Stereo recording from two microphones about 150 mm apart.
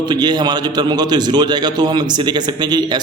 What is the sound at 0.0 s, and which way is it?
A man's voice, 30° right (ahead or behind).